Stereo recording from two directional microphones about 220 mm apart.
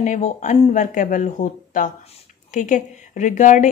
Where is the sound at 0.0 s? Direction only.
35° left (ahead or behind).